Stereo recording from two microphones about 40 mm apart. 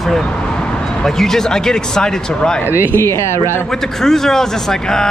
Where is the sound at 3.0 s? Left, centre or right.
Left.